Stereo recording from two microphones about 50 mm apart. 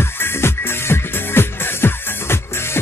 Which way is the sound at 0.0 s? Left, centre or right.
Left.